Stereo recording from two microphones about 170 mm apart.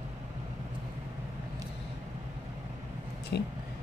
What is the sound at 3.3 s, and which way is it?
Speech, 75° left (ahead or behind).